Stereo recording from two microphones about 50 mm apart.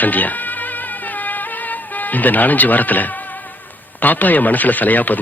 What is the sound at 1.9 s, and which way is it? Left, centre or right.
Speech, left.